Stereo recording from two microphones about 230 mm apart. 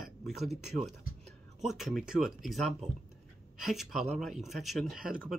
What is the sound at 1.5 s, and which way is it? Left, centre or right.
Speech, centre.